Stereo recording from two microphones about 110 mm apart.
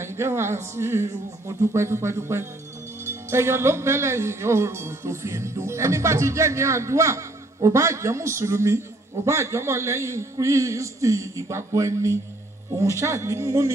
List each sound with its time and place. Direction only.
0.0 s speech: 25° right (ahead or behind)